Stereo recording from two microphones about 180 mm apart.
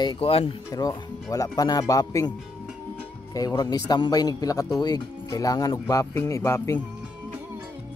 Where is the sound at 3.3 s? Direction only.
20° left (ahead or behind).